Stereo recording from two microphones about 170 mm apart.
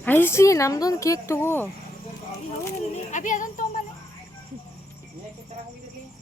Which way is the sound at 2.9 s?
45° left (ahead or behind).